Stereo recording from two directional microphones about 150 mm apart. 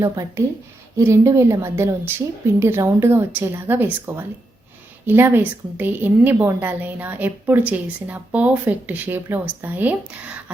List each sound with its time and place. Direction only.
0.0 s a woman's voice: 20° right (ahead or behind)